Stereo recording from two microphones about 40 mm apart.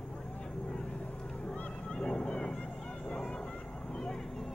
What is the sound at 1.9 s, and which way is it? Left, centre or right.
Vehicle, centre.